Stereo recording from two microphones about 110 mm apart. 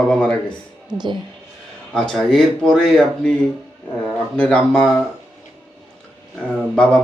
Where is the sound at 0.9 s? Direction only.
40° right (ahead or behind).